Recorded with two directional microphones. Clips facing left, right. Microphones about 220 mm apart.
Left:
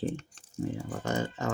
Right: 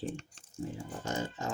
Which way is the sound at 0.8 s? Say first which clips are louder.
Left 3 dB; 75° left (ahead or behind).